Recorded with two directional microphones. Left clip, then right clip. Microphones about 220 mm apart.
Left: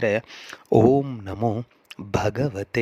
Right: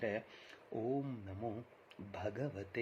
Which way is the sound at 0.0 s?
50° left (ahead or behind).